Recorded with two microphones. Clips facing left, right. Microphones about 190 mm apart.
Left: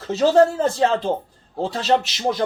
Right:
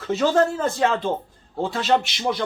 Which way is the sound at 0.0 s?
35° left (ahead or behind).